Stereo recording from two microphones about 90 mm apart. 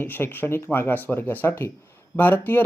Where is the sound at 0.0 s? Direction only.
25° left (ahead or behind).